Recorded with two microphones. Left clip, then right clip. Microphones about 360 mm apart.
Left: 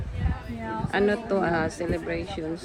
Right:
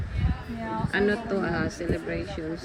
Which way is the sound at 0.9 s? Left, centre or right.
Centre.